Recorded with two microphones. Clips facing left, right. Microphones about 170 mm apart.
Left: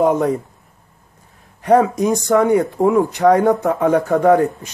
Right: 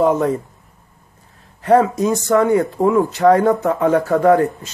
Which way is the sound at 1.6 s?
15° left (ahead or behind).